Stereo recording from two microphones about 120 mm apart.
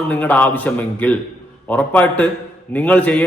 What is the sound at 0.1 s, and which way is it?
A man's voice, 15° left (ahead or behind).